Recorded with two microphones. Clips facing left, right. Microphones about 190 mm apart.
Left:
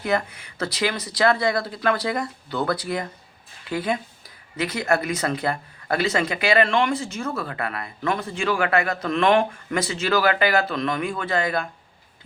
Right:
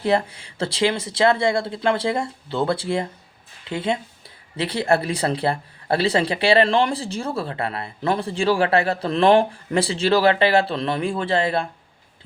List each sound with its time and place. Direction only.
0.0 s speech: 30° right (ahead or behind)